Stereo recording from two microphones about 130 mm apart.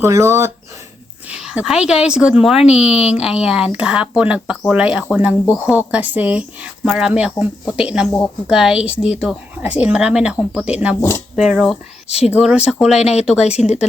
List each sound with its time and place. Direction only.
0.0 s speech: 20° right (ahead or behind)
1.3 s a woman's voice: 5° right (ahead or behind)
12.0 s speech: 50° left (ahead or behind)
12.4 s a woman's voice: 5° right (ahead or behind)
13.0 s speech: 55° left (ahead or behind)
13.2 s a woman's voice: 5° right (ahead or behind)
13.5 s speech: 60° left (ahead or behind)